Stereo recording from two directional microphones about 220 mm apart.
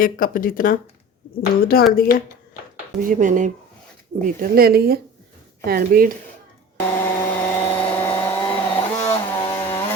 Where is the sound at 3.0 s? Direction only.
35° right (ahead or behind).